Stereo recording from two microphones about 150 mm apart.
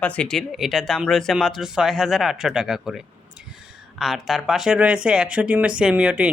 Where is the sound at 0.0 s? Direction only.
10° left (ahead or behind).